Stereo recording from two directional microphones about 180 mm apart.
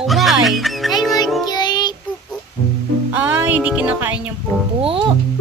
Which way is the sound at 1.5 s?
25° left (ahead or behind).